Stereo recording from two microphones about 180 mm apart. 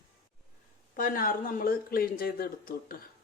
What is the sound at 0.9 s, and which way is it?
Speech, 50° left (ahead or behind).